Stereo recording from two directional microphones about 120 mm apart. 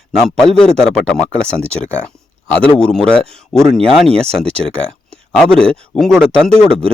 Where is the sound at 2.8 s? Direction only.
5° left (ahead or behind).